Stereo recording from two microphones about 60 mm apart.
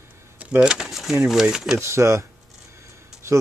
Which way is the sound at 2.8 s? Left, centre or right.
Right.